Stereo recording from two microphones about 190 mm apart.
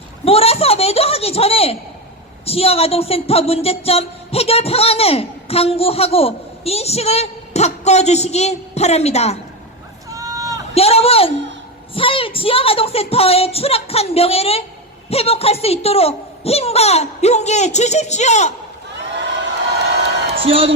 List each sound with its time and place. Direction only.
0.3 s a woman's voice: 30° left (ahead or behind)
10.1 s run: 20° right (ahead or behind)
10.8 s a woman's voice: 30° left (ahead or behind)
20.4 s a woman's voice: 30° right (ahead or behind)